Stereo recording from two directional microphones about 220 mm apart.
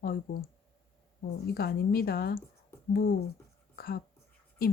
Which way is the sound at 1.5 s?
45° left (ahead or behind).